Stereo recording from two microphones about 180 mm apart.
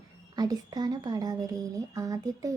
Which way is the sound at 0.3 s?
20° right (ahead or behind).